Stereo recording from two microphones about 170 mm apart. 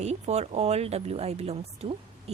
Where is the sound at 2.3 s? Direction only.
35° right (ahead or behind).